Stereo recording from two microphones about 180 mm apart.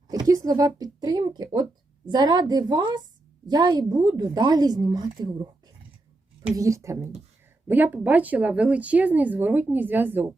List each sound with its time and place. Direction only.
0.1 s speech: 20° right (ahead or behind)